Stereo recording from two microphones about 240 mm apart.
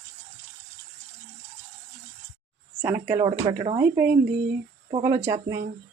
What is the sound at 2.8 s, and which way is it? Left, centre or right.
Speech, centre.